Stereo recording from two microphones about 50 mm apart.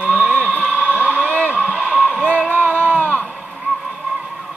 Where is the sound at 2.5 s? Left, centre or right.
Left.